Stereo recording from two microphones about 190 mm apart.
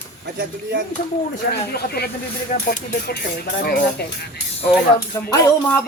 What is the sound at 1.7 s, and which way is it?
Speech, 55° left (ahead or behind).